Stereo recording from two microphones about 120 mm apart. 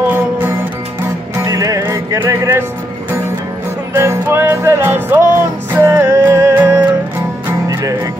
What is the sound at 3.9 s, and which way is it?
Music, 20° right (ahead or behind).